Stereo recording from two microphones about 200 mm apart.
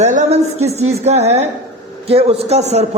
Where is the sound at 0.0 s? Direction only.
35° right (ahead or behind).